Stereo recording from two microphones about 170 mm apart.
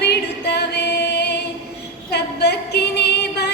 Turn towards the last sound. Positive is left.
turn(degrees=75)  # may be behind; listen again after turning